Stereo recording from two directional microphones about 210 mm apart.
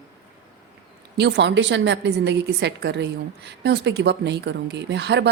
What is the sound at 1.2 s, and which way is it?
A woman's voice, 55° right (ahead or behind).